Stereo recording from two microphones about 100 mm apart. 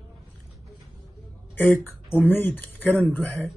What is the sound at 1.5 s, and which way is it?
Speech, 20° left (ahead or behind).